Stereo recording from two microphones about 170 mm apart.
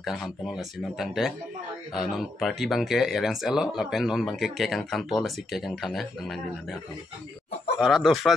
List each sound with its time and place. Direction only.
0.0 s speech: centre (ahead or behind)
7.8 s speech: centre (ahead or behind)